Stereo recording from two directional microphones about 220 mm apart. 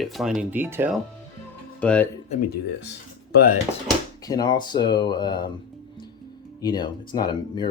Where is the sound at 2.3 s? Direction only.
45° left (ahead or behind).